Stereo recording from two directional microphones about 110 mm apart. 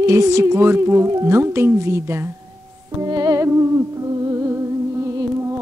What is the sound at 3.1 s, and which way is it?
Music, 35° right (ahead or behind).